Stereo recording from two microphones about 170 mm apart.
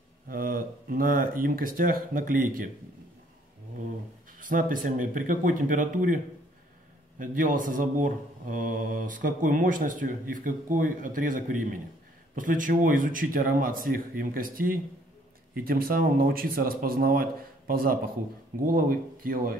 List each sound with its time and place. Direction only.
0.3 s speech: 55° right (ahead or behind)
4.4 s speech: 50° right (ahead or behind)